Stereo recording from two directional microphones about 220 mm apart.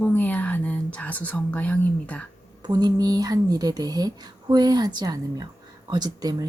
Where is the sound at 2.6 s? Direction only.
20° right (ahead or behind).